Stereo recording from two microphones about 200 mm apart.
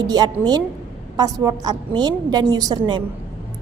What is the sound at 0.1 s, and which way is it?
A woman's voice, 20° right (ahead or behind).